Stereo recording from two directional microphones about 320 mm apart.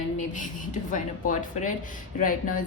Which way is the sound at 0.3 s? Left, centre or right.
Left.